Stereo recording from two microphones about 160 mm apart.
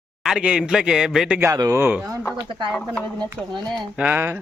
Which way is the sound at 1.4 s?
20° right (ahead or behind).